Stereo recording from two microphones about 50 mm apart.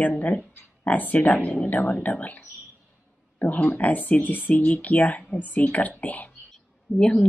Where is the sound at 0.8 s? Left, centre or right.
Left.